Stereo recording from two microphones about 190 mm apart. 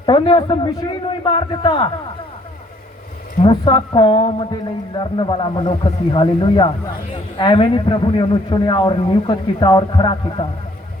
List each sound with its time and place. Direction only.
0.0 s a man's voice: 25° left (ahead or behind)
3.4 s a man's voice: 25° left (ahead or behind)